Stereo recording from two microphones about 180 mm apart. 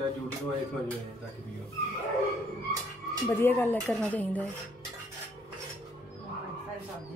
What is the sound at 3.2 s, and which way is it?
A woman's voice, 15° left (ahead or behind).